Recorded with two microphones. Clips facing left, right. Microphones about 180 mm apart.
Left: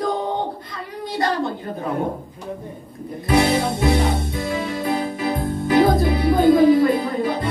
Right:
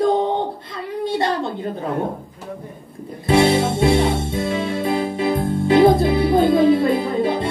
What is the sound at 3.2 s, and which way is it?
Music, 25° right (ahead or behind).